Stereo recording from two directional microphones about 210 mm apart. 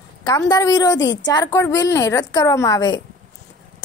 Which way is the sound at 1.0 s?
60° left (ahead or behind).